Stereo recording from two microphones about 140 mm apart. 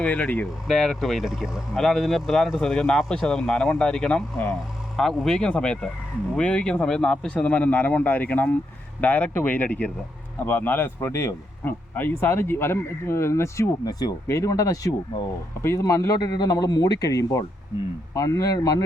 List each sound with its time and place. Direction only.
0.0 s speech: 10° left (ahead or behind); by 18.8 s 25° left (ahead or behind)